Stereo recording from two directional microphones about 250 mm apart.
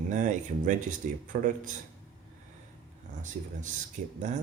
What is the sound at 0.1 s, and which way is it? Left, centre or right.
Speech, right.